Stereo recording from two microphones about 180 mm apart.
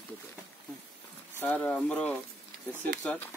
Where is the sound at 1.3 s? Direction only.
10° left (ahead or behind).